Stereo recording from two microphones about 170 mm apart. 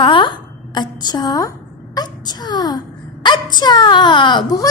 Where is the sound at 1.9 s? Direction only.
25° left (ahead or behind).